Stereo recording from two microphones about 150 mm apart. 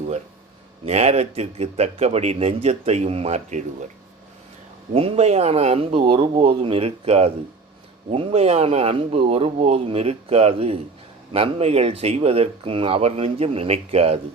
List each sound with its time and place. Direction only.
0.9 s speech: 45° right (ahead or behind)
4.9 s speech: 40° right (ahead or behind)